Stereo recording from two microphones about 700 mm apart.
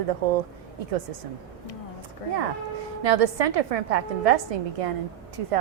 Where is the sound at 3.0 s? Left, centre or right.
Right.